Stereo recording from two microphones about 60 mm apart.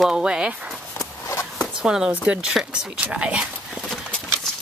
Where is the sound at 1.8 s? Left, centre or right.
Centre.